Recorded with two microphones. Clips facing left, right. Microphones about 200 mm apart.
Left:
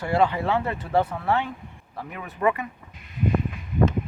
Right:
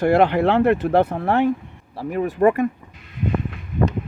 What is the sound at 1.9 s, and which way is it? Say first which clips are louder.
Speech: right 13 dB; 35° right (ahead or behind).